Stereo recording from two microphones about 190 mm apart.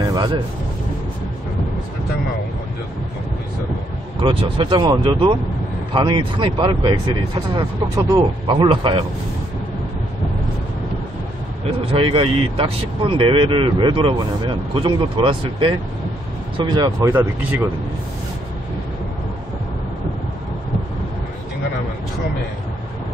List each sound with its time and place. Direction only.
0.0 s a sound: 20° right (ahead or behind)
4.2 s speech: 30° right (ahead or behind)
11.6 s speech: 30° right (ahead or behind); by 17.6 s 10° right (ahead or behind)